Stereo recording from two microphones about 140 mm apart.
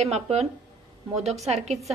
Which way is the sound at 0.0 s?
50° right (ahead or behind).